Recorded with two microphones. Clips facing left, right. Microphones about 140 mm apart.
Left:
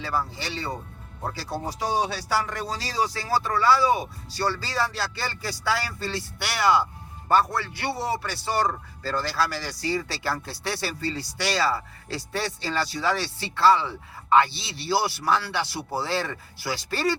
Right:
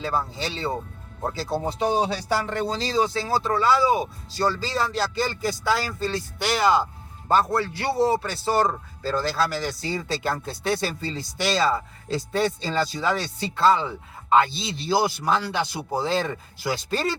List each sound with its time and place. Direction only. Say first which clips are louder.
0.0 s a man's voice: right 2 dB; 25° right (ahead or behind)
2.5 s a man's voice: right 6 dB; 25° right (ahead or behind)